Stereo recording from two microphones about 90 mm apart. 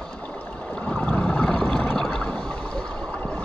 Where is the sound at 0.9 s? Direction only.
15° left (ahead or behind).